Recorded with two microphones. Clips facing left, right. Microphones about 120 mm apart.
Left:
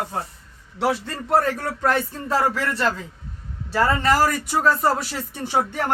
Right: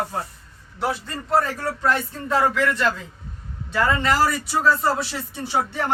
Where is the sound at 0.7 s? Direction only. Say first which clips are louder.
Left 3 dB; 70° left (ahead or behind); by 2.4 s 50° left (ahead or behind).